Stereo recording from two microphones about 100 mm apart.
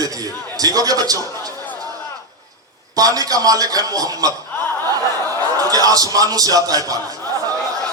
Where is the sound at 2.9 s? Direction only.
40° right (ahead or behind).